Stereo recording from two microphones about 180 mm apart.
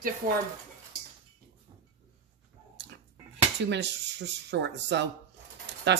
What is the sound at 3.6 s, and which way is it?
Speech, 75° right (ahead or behind).